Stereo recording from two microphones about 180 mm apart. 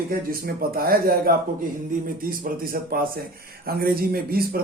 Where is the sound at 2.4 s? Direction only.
55° right (ahead or behind).